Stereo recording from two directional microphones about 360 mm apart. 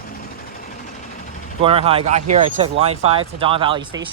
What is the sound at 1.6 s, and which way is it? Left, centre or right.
Speech, centre.